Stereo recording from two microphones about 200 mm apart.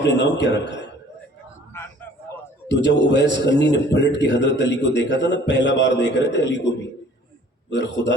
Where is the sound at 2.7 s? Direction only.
60° left (ahead or behind).